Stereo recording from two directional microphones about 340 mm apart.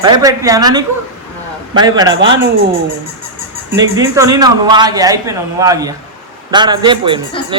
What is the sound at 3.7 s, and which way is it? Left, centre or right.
A man's voice, centre.